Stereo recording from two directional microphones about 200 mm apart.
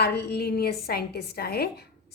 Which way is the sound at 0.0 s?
55° left (ahead or behind).